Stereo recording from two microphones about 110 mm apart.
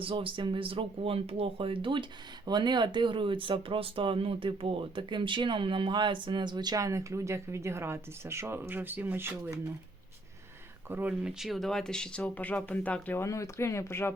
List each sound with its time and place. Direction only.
0.0 s speech: 55° right (ahead or behind); by 9.6 s 20° right (ahead or behind)
10.8 s speech: 15° right (ahead or behind); by 13.2 s 15° left (ahead or behind)
13.2 s speech: 30° left (ahead or behind)